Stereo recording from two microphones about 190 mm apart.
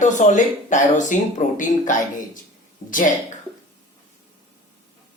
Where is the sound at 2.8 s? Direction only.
30° left (ahead or behind).